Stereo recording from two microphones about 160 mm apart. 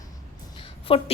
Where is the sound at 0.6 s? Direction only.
35° left (ahead or behind).